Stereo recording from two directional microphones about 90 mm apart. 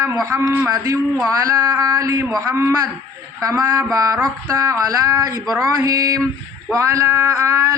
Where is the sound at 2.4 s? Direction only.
30° right (ahead or behind).